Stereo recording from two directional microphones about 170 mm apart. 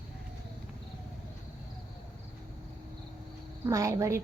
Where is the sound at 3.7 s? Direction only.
15° right (ahead or behind).